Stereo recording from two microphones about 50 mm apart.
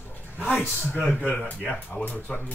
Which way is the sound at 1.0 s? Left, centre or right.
Centre.